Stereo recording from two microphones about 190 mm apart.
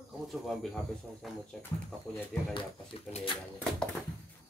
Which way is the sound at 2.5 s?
25° left (ahead or behind).